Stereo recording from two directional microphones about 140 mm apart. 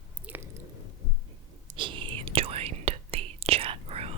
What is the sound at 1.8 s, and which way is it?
Whispering, 35° right (ahead or behind).